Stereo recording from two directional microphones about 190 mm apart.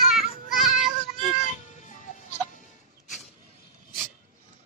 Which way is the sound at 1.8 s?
40° left (ahead or behind).